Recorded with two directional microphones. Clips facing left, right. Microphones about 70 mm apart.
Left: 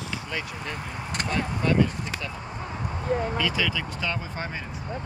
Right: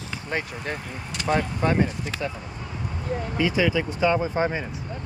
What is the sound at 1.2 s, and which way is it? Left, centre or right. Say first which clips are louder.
Speech: right 4 dB; right.